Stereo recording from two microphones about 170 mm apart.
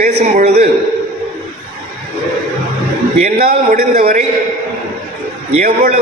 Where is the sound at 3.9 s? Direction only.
40° right (ahead or behind).